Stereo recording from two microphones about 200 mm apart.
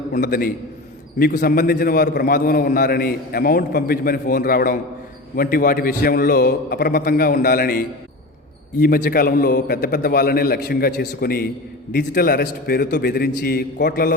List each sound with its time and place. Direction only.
0.1 s a man's voice: 50° left (ahead or behind)